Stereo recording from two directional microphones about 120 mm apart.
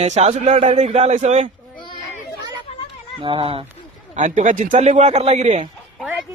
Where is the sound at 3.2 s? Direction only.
45° right (ahead or behind).